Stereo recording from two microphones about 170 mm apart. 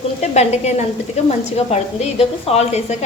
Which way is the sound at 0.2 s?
40° left (ahead or behind).